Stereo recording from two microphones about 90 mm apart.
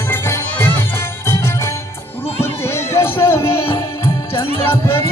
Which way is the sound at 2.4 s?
30° left (ahead or behind).